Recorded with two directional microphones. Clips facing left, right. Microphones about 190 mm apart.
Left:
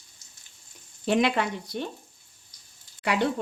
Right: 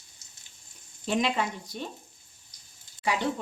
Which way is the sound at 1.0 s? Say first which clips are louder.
Left 4 dB; 65° left (ahead or behind).